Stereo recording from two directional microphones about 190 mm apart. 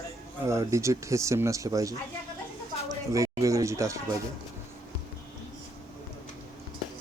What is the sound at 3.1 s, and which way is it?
Speech, 15° right (ahead or behind).